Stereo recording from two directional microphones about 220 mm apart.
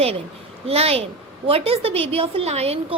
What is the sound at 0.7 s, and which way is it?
A woman's voice, 25° right (ahead or behind).